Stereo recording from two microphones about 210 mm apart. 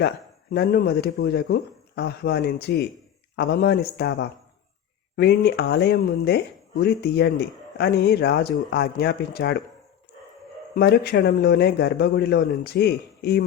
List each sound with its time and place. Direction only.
0.5 s speech: 45° left (ahead or behind)
10.8 s speech: 50° left (ahead or behind)